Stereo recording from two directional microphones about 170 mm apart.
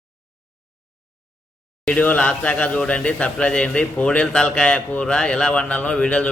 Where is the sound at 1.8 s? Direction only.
10° left (ahead or behind).